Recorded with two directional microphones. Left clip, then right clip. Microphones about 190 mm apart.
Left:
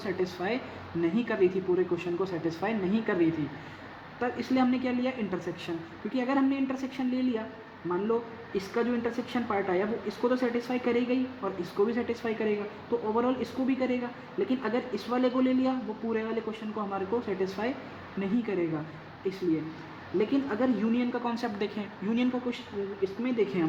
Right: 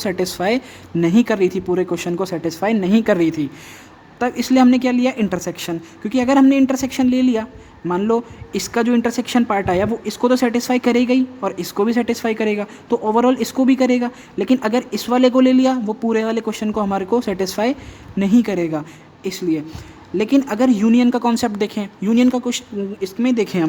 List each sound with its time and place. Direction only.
0.0 s a woman's voice: 55° right (ahead or behind)
20.1 s a woman's voice: 55° right (ahead or behind)